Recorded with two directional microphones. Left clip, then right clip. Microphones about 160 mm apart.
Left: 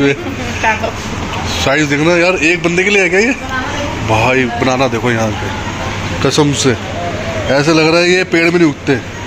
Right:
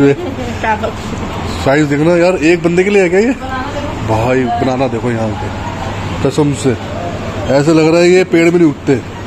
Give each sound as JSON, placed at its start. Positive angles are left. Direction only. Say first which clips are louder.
{"t": 1.6, "sound": "a man's voice", "louder": "right 1 dB", "side_deg": -30}
{"t": 4.1, "sound": "speech", "louder": "left 1 dB", "side_deg": -20}
{"t": 6.2, "sound": "speech", "louder": "left 1 dB", "side_deg": -10}
{"t": 7.5, "sound": "speech", "louder": "right 1 dB", "side_deg": -25}